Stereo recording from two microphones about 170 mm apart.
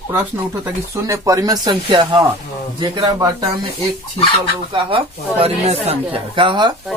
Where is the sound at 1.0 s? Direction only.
20° right (ahead or behind).